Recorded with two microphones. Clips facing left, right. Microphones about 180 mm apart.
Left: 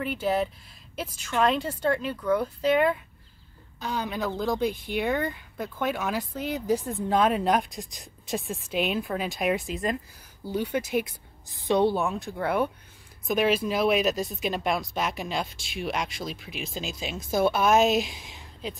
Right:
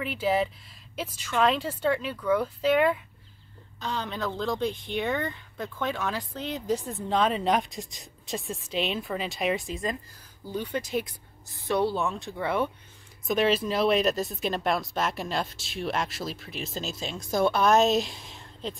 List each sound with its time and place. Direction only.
0.0 s speech: 5° right (ahead or behind)
3.8 s speech: 10° left (ahead or behind)
12.0 s speech: centre (ahead or behind)